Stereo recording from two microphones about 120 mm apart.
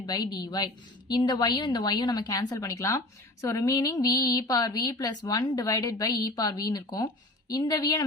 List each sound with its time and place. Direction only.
0.0 s a woman's voice: 35° left (ahead or behind)